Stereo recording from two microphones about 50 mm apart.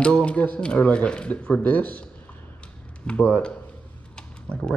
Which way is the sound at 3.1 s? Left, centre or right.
Left.